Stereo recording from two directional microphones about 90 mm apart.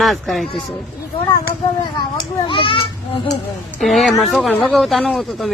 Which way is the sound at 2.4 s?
70° left (ahead or behind).